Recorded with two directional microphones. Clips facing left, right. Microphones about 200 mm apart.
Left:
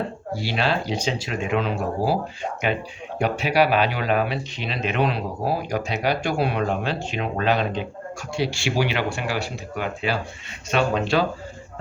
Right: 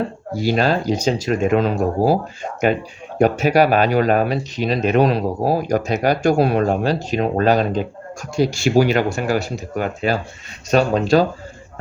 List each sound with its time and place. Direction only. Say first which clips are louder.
0.3 s speech: right 7 dB; 45° right (ahead or behind)